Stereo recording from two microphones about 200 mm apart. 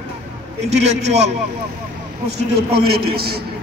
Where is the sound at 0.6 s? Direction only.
35° right (ahead or behind).